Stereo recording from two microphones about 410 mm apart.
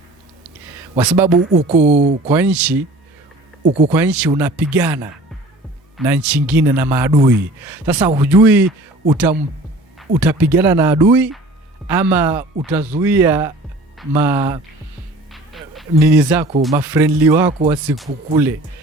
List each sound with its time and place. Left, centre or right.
0.9 s a man's voice: centre
1.3 s speech: right
2.3 s a man's voice: centre
3.8 s a man's voice: centre
6.1 s a man's voice: centre